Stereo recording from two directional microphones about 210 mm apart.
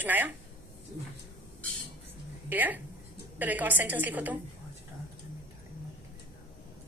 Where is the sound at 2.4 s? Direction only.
10° right (ahead or behind).